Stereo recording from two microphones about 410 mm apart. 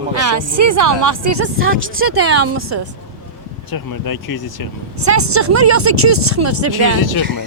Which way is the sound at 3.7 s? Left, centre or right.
Left.